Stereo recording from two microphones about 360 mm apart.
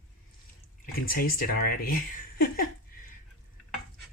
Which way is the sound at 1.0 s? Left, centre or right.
Left.